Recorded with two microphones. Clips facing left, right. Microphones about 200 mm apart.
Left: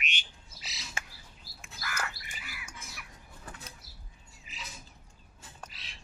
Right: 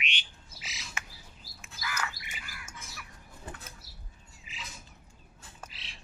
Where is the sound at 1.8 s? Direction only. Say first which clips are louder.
Right 1 dB; 50° left (ahead or behind).